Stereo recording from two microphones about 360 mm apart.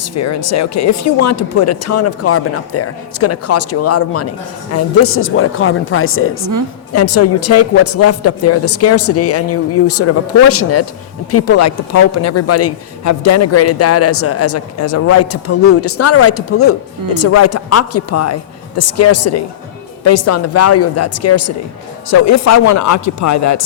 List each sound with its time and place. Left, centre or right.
0.0 s speech: left